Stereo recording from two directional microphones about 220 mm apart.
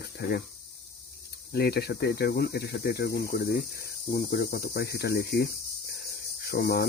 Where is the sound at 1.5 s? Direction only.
45° left (ahead or behind).